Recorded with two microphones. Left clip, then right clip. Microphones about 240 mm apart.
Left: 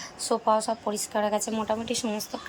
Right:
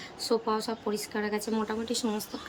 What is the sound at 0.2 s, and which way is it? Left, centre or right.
A woman's voice, centre.